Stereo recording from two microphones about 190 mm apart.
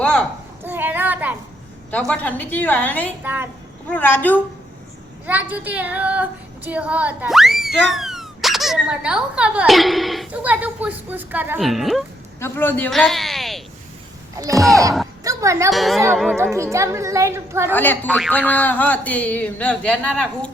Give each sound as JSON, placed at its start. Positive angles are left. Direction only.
{"t": 0.0, "sound": "a sound", "side_deg": 5}
{"t": 0.6, "sound": "a child's voice", "side_deg": -10}
{"t": 1.9, "sound": "speech", "side_deg": 5}
{"t": 3.2, "sound": "a woman's voice", "side_deg": -10}
{"t": 3.8, "sound": "speech", "side_deg": 10}
{"t": 5.2, "sound": "a woman's voice", "side_deg": -10}
{"t": 12.4, "sound": "a man's voice", "side_deg": 10}
{"t": 15.2, "sound": "speech", "side_deg": -15}
{"t": 15.7, "sound": "speech", "side_deg": 0}
{"t": 16.4, "sound": "a woman's voice", "side_deg": -15}
{"t": 17.7, "sound": "speech", "side_deg": 10}